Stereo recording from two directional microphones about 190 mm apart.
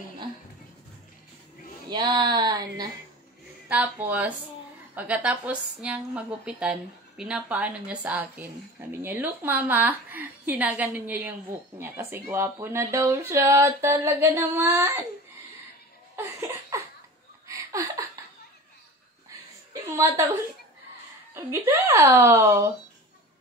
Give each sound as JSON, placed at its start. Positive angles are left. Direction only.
{"t": 1.9, "sound": "speech", "side_deg": -25}
{"t": 3.6, "sound": "a woman's voice", "side_deg": -5}
{"t": 16.2, "sound": "laughter", "side_deg": -15}
{"t": 17.5, "sound": "a sound", "side_deg": -15}
{"t": 19.7, "sound": "a sound", "side_deg": -15}
{"t": 21.3, "sound": "a woman's voice", "side_deg": -15}